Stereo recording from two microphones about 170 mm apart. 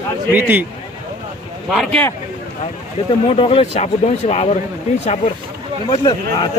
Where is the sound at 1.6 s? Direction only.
Centre (ahead or behind).